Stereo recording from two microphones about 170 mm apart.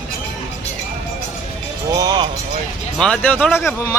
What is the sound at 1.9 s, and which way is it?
Speech, 25° right (ahead or behind).